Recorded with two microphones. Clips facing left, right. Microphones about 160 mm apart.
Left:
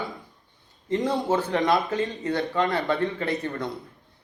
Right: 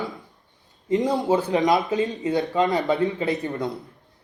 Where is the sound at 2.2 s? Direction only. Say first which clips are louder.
Right 3 dB; 20° right (ahead or behind).